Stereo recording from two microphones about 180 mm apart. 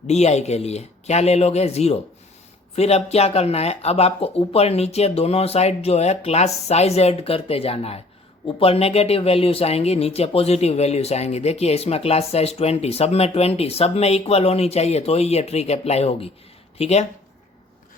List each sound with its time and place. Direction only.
0.1 s speech: 40° left (ahead or behind)